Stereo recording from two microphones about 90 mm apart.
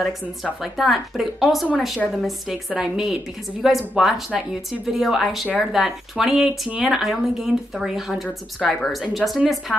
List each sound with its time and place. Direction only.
0.0 s speech: centre (ahead or behind)
2.7 s speech: 5° right (ahead or behind)